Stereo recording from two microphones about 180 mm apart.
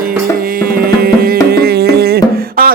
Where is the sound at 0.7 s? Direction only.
55° right (ahead or behind).